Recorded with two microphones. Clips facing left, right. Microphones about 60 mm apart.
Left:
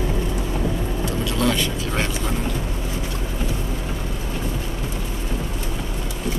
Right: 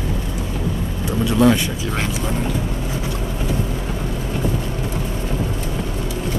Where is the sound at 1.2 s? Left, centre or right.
Centre.